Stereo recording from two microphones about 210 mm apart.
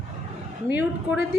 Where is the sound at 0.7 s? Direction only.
10° right (ahead or behind).